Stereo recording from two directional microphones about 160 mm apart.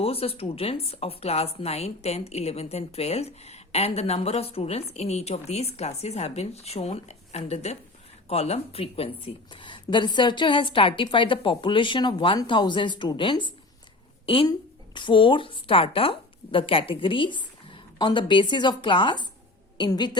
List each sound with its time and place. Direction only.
0.0 s a woman's voice: 35° left (ahead or behind)